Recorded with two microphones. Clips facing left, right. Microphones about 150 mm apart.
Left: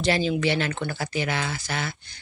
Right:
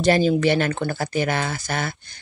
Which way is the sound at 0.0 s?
45° right (ahead or behind).